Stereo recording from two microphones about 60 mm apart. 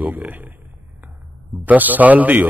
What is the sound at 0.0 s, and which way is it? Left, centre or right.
Speech, right.